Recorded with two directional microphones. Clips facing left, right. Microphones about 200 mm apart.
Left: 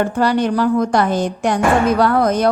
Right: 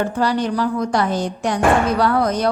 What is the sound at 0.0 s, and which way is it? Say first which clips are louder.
A woman's voice: left 3 dB; 55° left (ahead or behind).